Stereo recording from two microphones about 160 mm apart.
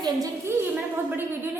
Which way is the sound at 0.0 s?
20° right (ahead or behind).